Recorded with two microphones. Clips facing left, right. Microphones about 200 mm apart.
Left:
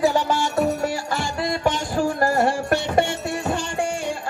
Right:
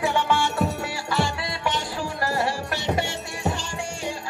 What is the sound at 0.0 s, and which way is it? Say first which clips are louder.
Music: left 3 dB; 40° left (ahead or behind).